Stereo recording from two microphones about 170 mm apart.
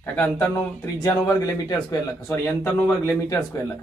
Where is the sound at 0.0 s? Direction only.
10° left (ahead or behind).